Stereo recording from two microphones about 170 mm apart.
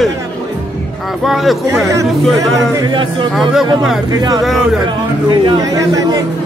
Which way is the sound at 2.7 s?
25° right (ahead or behind).